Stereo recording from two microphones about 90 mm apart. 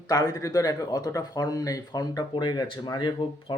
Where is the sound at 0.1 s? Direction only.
45° left (ahead or behind).